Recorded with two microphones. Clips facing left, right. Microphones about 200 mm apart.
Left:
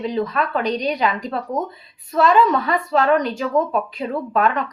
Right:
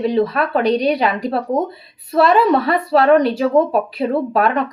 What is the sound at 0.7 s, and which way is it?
Speech, 10° right (ahead or behind).